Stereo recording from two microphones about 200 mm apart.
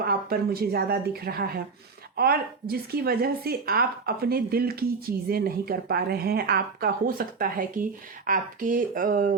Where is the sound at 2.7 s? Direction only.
50° right (ahead or behind).